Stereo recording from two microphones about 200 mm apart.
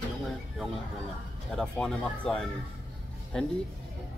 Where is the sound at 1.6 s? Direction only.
5° left (ahead or behind).